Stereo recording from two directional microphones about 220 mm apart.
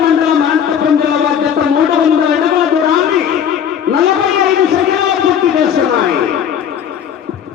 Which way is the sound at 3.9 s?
Centre (ahead or behind).